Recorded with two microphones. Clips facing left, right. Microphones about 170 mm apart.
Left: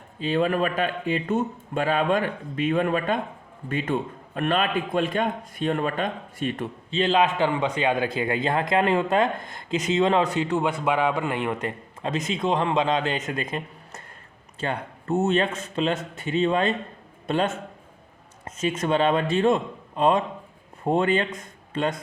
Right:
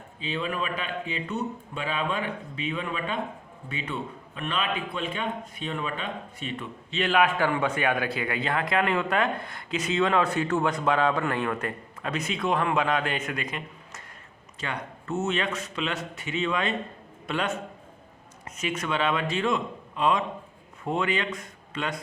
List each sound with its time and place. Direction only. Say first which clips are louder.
0.2 s speech: left 8 dB; 45° left (ahead or behind)
6.9 s a man's voice: left 2 dB; 25° left (ahead or behind)
18.9 s a man's voice: left 6 dB; 35° left (ahead or behind)